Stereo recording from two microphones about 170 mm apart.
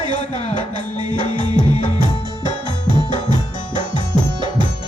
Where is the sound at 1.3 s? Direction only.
30° right (ahead or behind).